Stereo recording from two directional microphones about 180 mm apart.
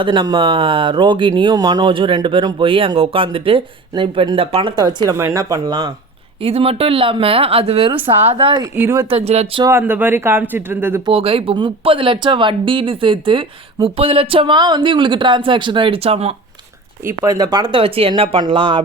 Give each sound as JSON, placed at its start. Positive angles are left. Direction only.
{"t": 0.0, "sound": "speech", "side_deg": -25}
{"t": 8.7, "sound": "speech", "side_deg": -15}
{"t": 9.0, "sound": "speech", "side_deg": -35}
{"t": 9.6, "sound": "speech", "side_deg": -15}
{"t": 11.0, "sound": "speech", "side_deg": -30}
{"t": 17.1, "sound": "speech", "side_deg": -20}